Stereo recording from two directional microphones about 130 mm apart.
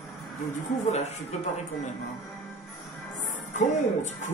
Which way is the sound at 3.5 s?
65° left (ahead or behind).